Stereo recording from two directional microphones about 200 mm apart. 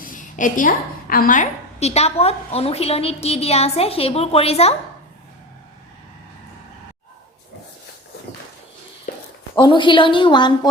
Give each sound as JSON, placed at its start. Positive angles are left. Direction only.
{"t": 0.0, "sound": "a woman's voice", "side_deg": 40}
{"t": 9.6, "sound": "a woman's voice", "side_deg": 25}